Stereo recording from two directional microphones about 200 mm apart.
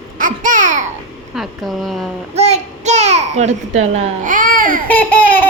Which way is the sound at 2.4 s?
35° right (ahead or behind).